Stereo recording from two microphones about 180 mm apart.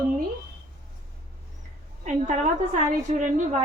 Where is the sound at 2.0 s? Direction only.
45° right (ahead or behind).